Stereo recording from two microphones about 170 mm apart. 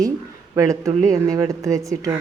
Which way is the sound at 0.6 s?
20° right (ahead or behind).